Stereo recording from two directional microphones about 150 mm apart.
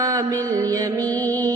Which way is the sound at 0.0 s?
20° right (ahead or behind).